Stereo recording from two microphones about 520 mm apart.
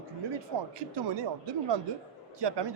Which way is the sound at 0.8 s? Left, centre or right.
Right.